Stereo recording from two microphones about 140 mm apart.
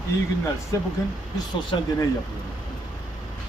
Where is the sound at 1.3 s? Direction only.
30° left (ahead or behind).